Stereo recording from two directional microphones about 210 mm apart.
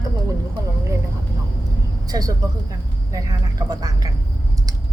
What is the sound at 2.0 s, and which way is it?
Speech, 20° right (ahead or behind).